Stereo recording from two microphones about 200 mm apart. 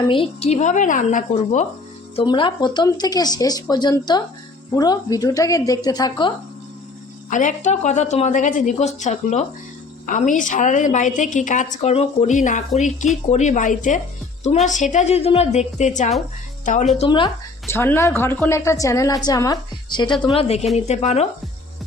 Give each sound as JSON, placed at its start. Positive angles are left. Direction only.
{"t": 0.1, "sound": "a woman's voice", "side_deg": 30}
{"t": 2.1, "sound": "speech", "side_deg": 25}
{"t": 7.3, "sound": "a woman's voice", "side_deg": 40}
{"t": 17.0, "sound": "a woman's voice", "side_deg": 25}